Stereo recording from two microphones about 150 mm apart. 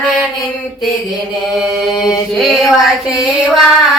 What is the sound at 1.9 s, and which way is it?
Mantra, 25° left (ahead or behind).